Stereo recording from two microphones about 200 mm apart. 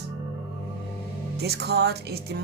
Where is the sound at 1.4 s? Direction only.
55° right (ahead or behind).